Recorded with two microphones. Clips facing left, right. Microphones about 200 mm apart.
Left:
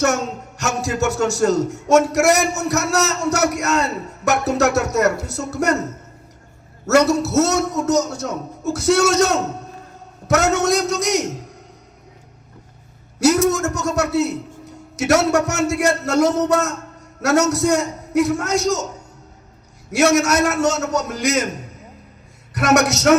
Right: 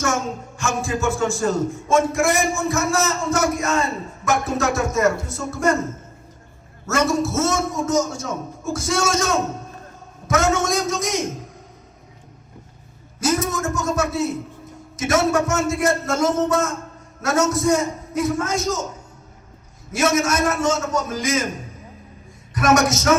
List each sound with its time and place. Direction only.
0.0 s speech: 70° left (ahead or behind)
6.9 s speech: 70° left (ahead or behind)
13.1 s speech: 75° left (ahead or behind)
19.9 s speech: 75° left (ahead or behind)
22.5 s speech: 70° left (ahead or behind)